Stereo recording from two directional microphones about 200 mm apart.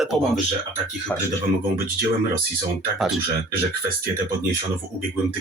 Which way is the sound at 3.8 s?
45° right (ahead or behind).